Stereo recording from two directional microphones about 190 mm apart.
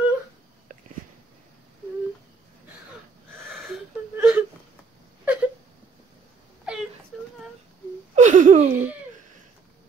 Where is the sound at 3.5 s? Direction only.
Centre (ahead or behind).